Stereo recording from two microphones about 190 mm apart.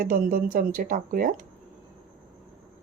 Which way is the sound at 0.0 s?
50° right (ahead or behind).